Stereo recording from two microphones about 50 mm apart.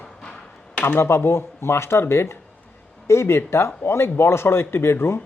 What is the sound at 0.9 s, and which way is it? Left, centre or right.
Speech, left.